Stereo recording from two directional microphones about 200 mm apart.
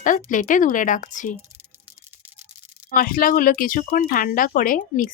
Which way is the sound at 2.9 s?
45° left (ahead or behind).